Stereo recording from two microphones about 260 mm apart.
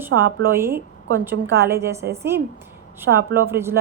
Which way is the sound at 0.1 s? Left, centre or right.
Right.